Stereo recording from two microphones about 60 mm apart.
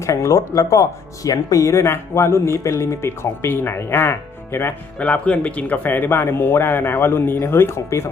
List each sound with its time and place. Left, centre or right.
0.0 s speech: left
4.9 s speech: left